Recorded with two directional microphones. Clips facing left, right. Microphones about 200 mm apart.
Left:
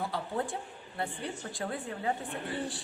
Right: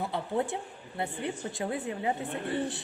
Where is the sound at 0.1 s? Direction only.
20° right (ahead or behind).